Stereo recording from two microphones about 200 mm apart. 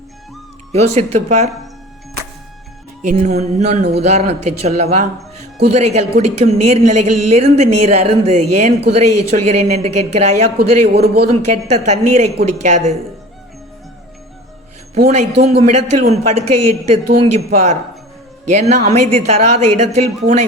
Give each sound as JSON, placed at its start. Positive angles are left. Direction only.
{"t": 0.7, "sound": "a woman's voice", "side_deg": -30}
{"t": 3.0, "sound": "a woman's voice", "side_deg": -35}
{"t": 10.6, "sound": "a man's voice", "side_deg": -50}
{"t": 11.4, "sound": "a woman's voice", "side_deg": -35}
{"t": 14.9, "sound": "a man's voice", "side_deg": -50}
{"t": 15.4, "sound": "a woman's voice", "side_deg": -35}